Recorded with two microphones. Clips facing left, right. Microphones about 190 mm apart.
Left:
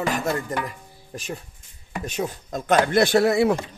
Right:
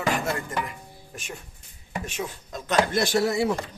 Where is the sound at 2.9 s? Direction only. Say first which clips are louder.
Left 5 dB; 60° left (ahead or behind).